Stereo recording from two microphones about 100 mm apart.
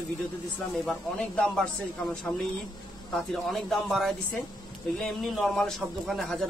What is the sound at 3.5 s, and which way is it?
A man's voice, centre (ahead or behind).